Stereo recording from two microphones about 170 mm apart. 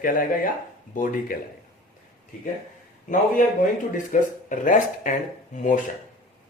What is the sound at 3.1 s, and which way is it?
Speech, 50° left (ahead or behind).